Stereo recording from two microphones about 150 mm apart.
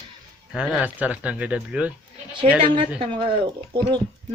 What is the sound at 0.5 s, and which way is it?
Speech, 5° right (ahead or behind).